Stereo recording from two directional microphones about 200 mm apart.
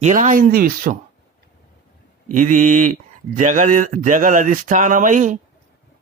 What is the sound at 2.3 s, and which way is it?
Speech, 40° right (ahead or behind).